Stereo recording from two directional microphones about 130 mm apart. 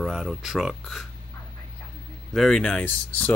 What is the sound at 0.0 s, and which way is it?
Speech, centre (ahead or behind).